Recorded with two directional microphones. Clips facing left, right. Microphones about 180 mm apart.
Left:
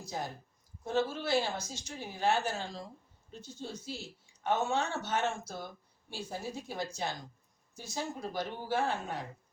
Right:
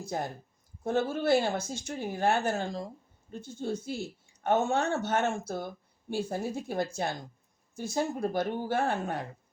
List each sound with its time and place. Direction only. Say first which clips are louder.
0.0 s speech: right 5 dB; 55° right (ahead or behind)